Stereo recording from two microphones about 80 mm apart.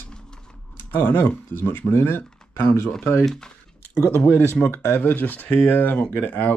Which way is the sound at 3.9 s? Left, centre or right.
Left.